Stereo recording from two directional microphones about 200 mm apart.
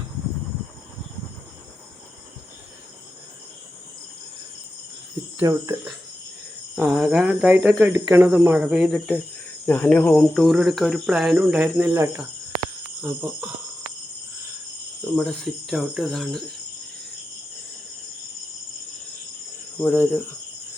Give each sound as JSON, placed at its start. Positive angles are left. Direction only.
{"t": 5.4, "sound": "speech", "side_deg": -15}
{"t": 6.7, "sound": "speech", "side_deg": -5}
{"t": 9.6, "sound": "speech", "side_deg": 10}
{"t": 15.1, "sound": "speech", "side_deg": 5}
{"t": 19.8, "sound": "cricket", "side_deg": 10}